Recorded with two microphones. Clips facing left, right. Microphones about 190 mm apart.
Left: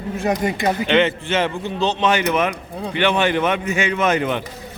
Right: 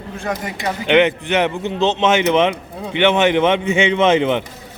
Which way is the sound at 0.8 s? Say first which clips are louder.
Right 6 dB; 15° right (ahead or behind).